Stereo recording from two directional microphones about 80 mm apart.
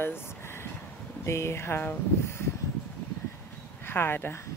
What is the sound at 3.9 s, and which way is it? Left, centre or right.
Speech, left.